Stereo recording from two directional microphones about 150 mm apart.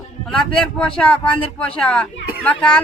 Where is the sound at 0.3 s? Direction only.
5° left (ahead or behind).